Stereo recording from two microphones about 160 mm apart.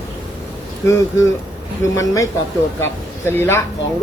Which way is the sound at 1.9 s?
20° left (ahead or behind).